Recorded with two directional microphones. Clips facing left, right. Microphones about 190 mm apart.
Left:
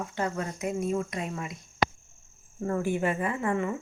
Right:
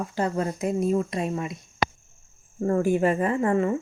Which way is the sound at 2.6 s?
40° right (ahead or behind).